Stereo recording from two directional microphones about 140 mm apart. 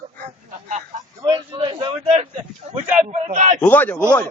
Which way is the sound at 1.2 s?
35° right (ahead or behind).